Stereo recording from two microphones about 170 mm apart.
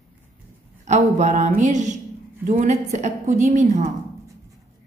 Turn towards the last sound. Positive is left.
turn(degrees=-45)  # may be behind; listen again after turning